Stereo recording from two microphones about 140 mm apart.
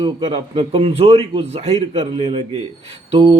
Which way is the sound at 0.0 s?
40° right (ahead or behind).